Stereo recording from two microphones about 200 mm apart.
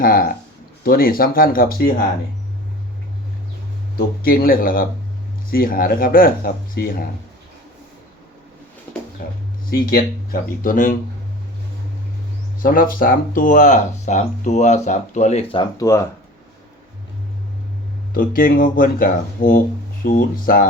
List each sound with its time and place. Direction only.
0.0 s speech: 45° left (ahead or behind)
3.9 s speech: 45° left (ahead or behind)
9.6 s speech: 50° left (ahead or behind)
12.6 s speech: 45° left (ahead or behind)
15.8 s speech: 15° left (ahead or behind)
18.1 s speech: 45° left (ahead or behind)